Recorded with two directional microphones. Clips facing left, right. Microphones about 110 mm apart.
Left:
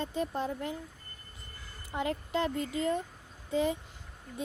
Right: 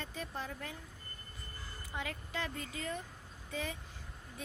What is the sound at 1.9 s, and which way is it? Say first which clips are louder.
Speech: left 10 dB; 30° left (ahead or behind).